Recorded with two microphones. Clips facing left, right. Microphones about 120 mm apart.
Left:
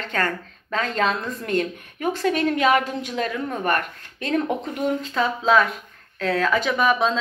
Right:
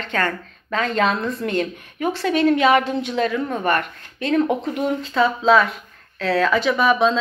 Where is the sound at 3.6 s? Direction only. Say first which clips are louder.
Right 2 dB; 40° left (ahead or behind).